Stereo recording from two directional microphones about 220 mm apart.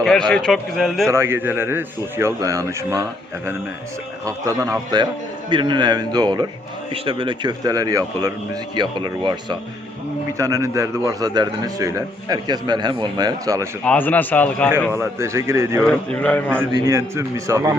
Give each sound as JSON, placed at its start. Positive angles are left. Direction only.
{"t": 0.0, "sound": "speech", "side_deg": 5}
{"t": 1.1, "sound": "a man's voice", "side_deg": -10}
{"t": 13.8, "sound": "a man's voice", "side_deg": 5}
{"t": 14.9, "sound": "a man's voice", "side_deg": -10}
{"t": 15.8, "sound": "speech", "side_deg": 5}
{"t": 16.5, "sound": "a man's voice", "side_deg": -10}